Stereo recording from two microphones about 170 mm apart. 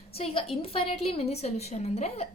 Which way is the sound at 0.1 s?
35° left (ahead or behind).